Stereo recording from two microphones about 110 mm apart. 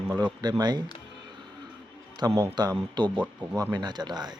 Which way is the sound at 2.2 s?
40° right (ahead or behind).